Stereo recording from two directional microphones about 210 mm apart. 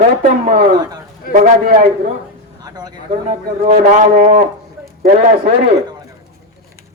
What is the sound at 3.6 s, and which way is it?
A man's voice, 40° right (ahead or behind).